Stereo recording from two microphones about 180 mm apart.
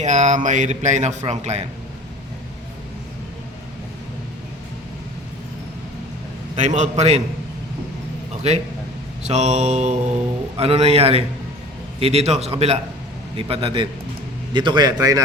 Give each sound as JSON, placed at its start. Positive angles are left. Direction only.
{"t": 0.0, "sound": "speech", "side_deg": -40}
{"t": 6.6, "sound": "speech", "side_deg": -40}
{"t": 9.2, "sound": "a man's voice", "side_deg": -40}